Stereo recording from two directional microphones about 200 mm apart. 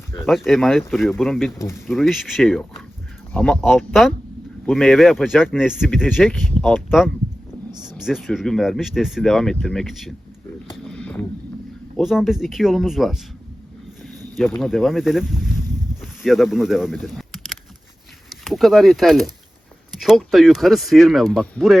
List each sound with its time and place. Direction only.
0.3 s speech: centre (ahead or behind)
7.7 s a sound: 20° right (ahead or behind)
7.9 s speech: centre (ahead or behind)
10.8 s boat: 5° left (ahead or behind)
11.9 s speech: centre (ahead or behind)
14.6 s boat: centre (ahead or behind)
18.3 s speech: centre (ahead or behind)